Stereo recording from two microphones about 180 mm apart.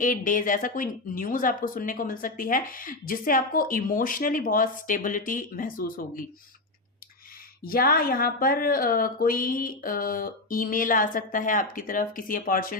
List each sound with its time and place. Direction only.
0.0 s speech: 50° left (ahead or behind)
7.6 s speech: 55° left (ahead or behind)